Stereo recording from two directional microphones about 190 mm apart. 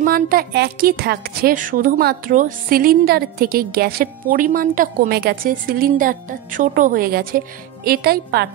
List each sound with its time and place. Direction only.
0.0 s a woman's voice: 50° right (ahead or behind)